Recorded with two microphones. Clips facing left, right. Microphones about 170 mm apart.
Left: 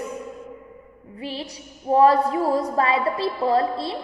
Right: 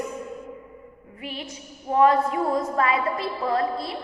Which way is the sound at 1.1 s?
30° left (ahead or behind).